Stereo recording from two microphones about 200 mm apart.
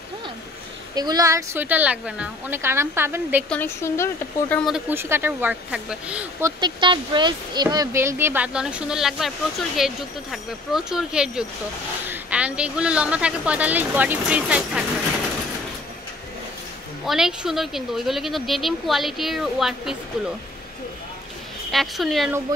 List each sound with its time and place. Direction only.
0.9 s a woman's voice: 20° right (ahead or behind)
3.4 s speech: 10° left (ahead or behind); by 6.5 s 5° right (ahead or behind)
6.6 s a woman's voice: 20° right (ahead or behind); by 14.9 s 5° right (ahead or behind)
17.0 s speech: centre (ahead or behind)
21.6 s speech: centre (ahead or behind)